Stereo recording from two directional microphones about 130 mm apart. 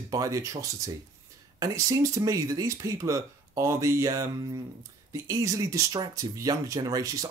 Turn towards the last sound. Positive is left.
turn(degrees=-25)  # may be behind; listen again after turning